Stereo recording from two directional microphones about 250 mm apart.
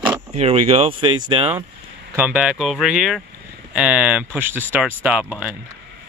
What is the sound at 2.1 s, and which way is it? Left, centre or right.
Speech, centre.